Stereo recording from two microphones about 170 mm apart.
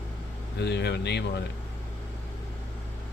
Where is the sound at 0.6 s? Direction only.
85° left.